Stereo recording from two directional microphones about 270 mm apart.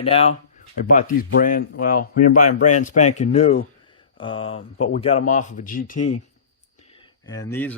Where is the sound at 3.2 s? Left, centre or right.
Left.